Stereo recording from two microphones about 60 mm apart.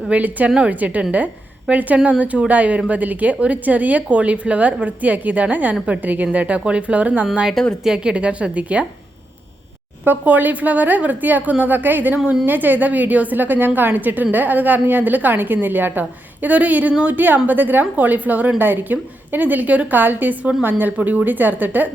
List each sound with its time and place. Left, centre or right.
0.1 s a woman's voice: right
10.0 s a woman's voice: right
17.2 s a woman's voice: right